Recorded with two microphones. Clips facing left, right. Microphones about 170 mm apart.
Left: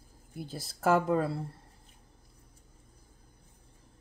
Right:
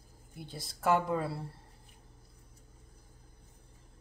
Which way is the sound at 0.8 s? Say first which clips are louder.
Left 3 dB; 45° left (ahead or behind).